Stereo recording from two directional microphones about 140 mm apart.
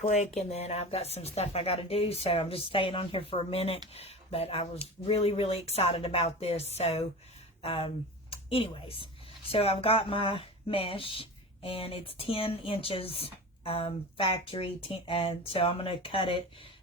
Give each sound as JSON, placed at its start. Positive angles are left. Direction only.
{"t": 0.0, "sound": "speech", "side_deg": 55}